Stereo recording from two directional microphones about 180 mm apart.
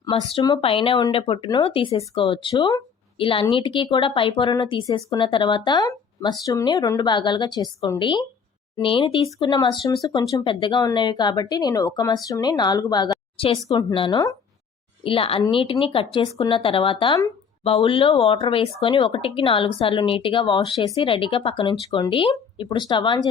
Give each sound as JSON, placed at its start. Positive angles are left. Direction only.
{"t": 0.0, "sound": "speech", "side_deg": 25}